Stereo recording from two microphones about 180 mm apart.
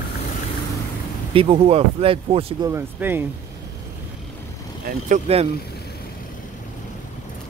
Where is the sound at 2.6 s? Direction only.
15° right (ahead or behind).